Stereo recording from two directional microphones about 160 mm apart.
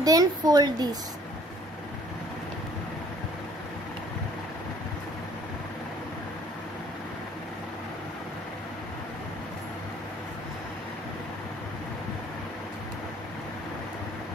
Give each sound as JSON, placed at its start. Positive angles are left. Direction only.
{"t": 0.0, "sound": "a woman's voice", "side_deg": -20}